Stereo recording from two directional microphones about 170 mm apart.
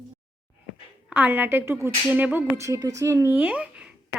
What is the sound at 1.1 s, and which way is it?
Speech, 10° right (ahead or behind).